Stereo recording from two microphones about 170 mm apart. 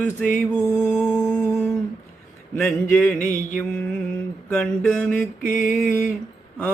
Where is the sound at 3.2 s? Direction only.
50° left (ahead or behind).